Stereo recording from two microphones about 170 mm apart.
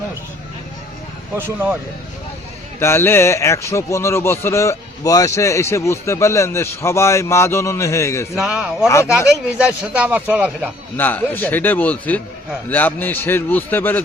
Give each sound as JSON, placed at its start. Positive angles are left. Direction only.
{"t": 2.8, "sound": "speech", "side_deg": 15}
{"t": 8.4, "sound": "speech", "side_deg": -5}
{"t": 10.9, "sound": "speech", "side_deg": 10}